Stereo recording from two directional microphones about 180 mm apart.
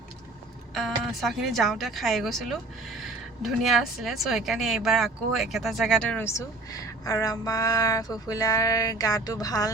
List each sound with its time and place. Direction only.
0.7 s speech: centre (ahead or behind); by 9.7 s 20° left (ahead or behind)